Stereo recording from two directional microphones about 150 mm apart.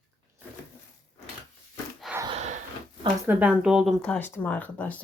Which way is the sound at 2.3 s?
50° right (ahead or behind).